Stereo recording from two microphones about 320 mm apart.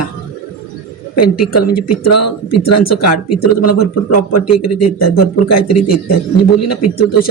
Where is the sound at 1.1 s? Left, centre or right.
Left.